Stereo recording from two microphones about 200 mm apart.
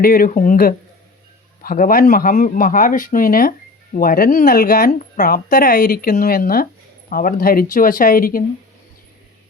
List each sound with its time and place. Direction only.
0.0 s a woman's voice: 45° left (ahead or behind)